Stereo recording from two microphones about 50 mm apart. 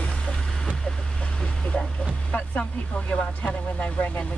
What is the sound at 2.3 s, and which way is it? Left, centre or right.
Speech, left.